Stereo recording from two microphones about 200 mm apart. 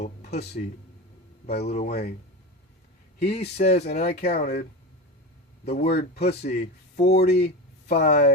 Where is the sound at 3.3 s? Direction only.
35° left (ahead or behind).